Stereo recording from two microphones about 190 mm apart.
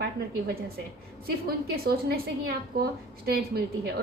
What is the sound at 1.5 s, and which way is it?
A woman's voice, 55° right (ahead or behind).